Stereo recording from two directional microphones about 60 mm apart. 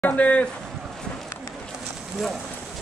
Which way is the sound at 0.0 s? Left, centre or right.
Left.